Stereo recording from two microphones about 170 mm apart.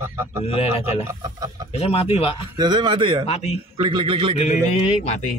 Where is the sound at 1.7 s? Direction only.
35° left (ahead or behind).